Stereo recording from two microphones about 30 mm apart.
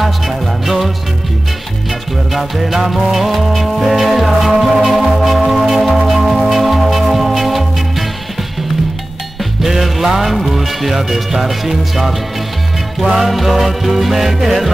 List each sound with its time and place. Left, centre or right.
0.0 s music: centre
2.3 s music: centre
9.4 s music: centre
10.5 s speech: centre
13.2 s music: centre